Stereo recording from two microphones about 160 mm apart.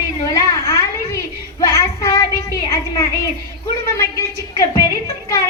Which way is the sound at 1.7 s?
20° left (ahead or behind).